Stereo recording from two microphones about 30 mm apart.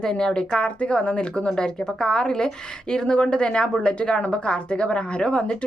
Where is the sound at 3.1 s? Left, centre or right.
Left.